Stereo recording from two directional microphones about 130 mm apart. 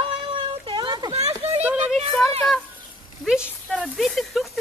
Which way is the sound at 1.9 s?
5° left (ahead or behind).